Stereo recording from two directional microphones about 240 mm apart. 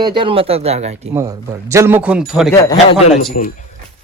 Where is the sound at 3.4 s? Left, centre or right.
Left.